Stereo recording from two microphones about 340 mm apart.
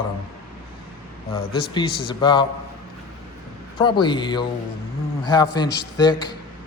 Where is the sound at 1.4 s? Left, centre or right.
Left.